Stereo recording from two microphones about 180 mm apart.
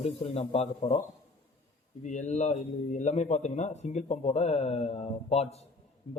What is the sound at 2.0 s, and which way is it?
A man's voice, 40° left (ahead or behind).